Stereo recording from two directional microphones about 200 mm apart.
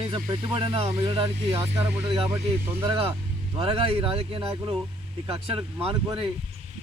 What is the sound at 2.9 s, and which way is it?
Speech, 30° right (ahead or behind).